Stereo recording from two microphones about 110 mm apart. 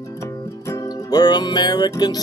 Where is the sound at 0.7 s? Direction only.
35° left (ahead or behind).